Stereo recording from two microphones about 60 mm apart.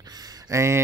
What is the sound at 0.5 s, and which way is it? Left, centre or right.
Speech, right.